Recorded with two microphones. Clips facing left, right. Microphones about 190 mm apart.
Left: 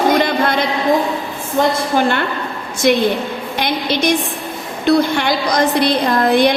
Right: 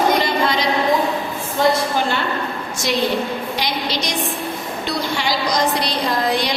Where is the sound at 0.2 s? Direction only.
55° left (ahead or behind).